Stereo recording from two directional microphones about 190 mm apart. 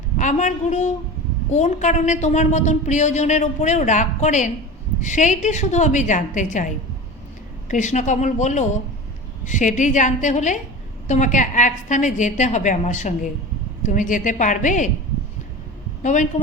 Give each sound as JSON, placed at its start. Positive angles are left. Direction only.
{"t": 0.2, "sound": "a woman's voice", "side_deg": 40}
{"t": 16.0, "sound": "a woman's voice", "side_deg": 40}